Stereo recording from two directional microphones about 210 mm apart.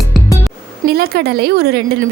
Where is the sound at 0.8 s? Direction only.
45° right (ahead or behind).